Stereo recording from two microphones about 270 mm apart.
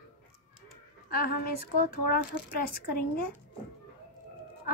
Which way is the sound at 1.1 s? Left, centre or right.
Left.